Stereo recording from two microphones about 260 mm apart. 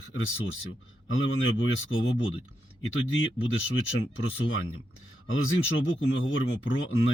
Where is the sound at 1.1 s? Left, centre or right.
Left.